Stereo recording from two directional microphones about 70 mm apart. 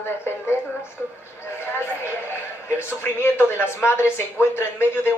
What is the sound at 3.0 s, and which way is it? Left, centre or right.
A woman's voice, left.